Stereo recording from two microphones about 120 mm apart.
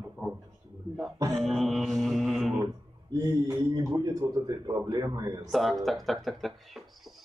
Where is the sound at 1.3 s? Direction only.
Centre (ahead or behind).